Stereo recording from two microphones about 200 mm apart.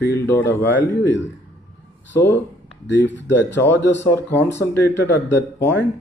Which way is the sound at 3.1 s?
65° left (ahead or behind).